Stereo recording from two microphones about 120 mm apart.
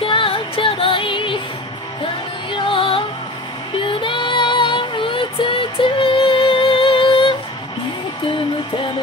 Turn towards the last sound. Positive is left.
turn(degrees=45)  # may be behind; listen again after turning